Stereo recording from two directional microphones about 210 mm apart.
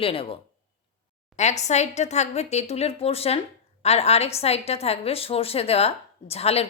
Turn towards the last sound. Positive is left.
turn(degrees=30)  # may be behind; listen again after turning